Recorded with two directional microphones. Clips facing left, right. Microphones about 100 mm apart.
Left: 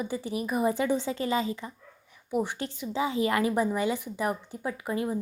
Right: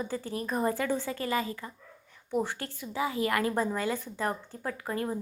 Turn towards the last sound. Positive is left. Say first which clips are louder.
# left 2 dB
turn(degrees=15)  # may be behind; listen again after turning